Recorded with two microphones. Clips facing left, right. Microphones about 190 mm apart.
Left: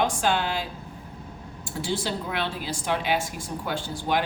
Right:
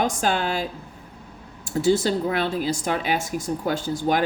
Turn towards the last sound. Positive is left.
turn(degrees=-45)  # may be behind; listen again after turning